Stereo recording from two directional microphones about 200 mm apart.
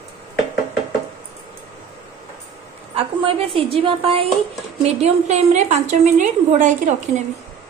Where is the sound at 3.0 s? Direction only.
30° right (ahead or behind).